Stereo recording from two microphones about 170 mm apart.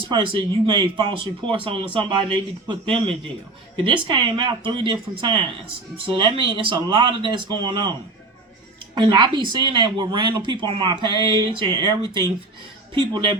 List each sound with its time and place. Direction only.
0.1 s speech: 30° right (ahead or behind)
9.0 s speech: 25° right (ahead or behind)